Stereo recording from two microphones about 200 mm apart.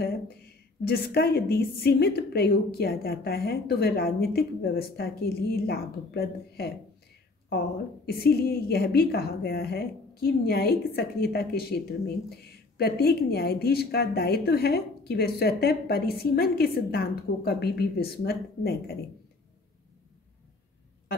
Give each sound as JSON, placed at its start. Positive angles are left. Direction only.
{"t": 0.8, "sound": "a woman's voice", "side_deg": 50}